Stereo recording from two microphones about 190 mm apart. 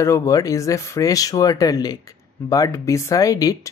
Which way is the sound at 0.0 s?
15° left (ahead or behind).